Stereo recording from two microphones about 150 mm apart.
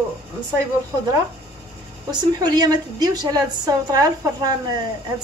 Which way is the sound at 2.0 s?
30° right (ahead or behind).